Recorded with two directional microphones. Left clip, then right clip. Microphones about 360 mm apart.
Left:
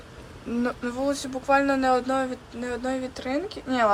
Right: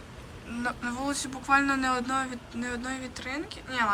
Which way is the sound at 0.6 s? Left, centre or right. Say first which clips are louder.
Left 4 dB; centre.